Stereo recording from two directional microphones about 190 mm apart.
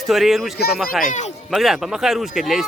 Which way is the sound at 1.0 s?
40° left (ahead or behind).